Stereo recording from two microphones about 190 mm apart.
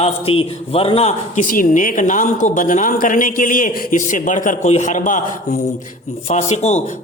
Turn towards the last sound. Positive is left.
turn(degrees=35)  # may be behind; listen again after turning